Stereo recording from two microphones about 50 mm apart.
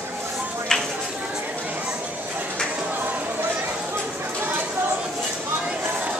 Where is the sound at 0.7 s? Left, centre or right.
Centre.